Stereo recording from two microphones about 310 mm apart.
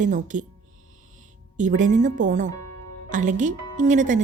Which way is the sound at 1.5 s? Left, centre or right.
Right.